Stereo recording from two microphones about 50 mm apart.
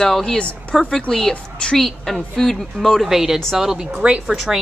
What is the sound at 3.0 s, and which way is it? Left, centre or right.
Chicken, centre.